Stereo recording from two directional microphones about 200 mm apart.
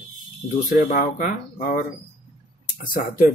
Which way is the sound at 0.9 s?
45° left (ahead or behind).